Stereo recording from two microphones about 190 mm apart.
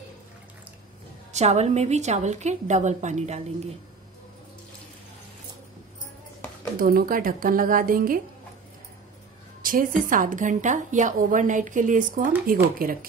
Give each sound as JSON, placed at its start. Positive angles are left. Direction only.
{"t": 1.3, "sound": "a woman's voice", "side_deg": -35}
{"t": 6.8, "sound": "a woman's voice", "side_deg": -50}
{"t": 9.6, "sound": "a woman's voice", "side_deg": -45}